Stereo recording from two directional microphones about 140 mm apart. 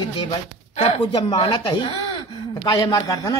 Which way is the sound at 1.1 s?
30° left (ahead or behind).